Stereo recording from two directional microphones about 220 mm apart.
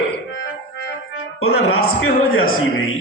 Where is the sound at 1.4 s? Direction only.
75° left (ahead or behind).